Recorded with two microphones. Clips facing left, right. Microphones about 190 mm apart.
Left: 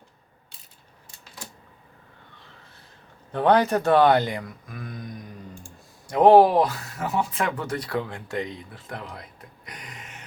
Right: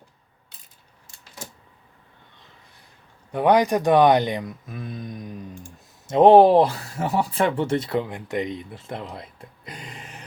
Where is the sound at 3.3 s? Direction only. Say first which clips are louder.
Right 1 dB; 10° right (ahead or behind).